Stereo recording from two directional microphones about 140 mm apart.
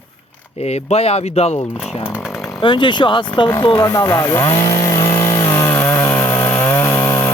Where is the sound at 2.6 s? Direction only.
35° left (ahead or behind).